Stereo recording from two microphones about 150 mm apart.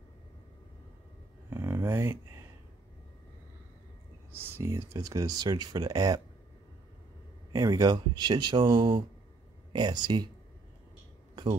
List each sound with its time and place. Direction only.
1.5 s a sound: 15° right (ahead or behind)
4.3 s speech: 15° right (ahead or behind)
7.5 s speech: 25° right (ahead or behind)